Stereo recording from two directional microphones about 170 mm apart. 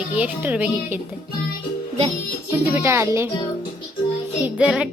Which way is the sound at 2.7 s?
15° right (ahead or behind).